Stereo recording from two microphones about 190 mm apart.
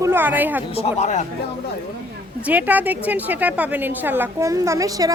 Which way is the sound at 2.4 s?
10° right (ahead or behind).